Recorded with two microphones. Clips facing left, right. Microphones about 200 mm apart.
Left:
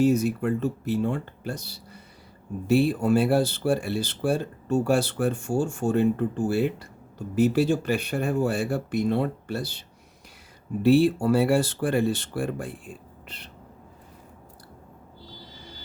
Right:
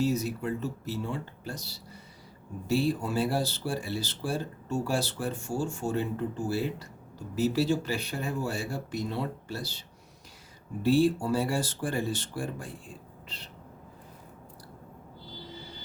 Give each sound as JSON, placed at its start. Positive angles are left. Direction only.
{"t": 0.0, "sound": "speech", "side_deg": 55}
{"t": 10.8, "sound": "speech", "side_deg": 65}